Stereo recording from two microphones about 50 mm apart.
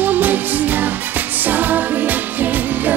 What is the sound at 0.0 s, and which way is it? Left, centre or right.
Music, right.